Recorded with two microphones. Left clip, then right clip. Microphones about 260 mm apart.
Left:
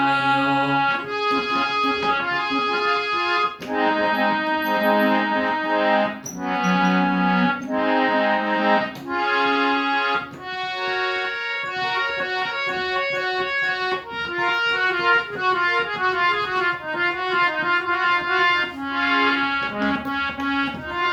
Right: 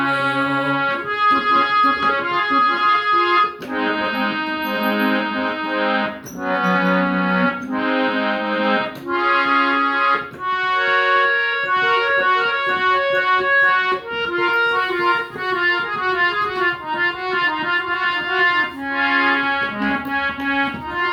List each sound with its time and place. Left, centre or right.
3.2 s music: right
3.8 s accordion: centre
11.7 s keyboard: centre
14.8 s music: centre